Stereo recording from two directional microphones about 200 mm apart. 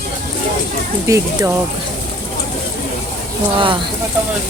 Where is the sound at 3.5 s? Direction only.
25° right (ahead or behind).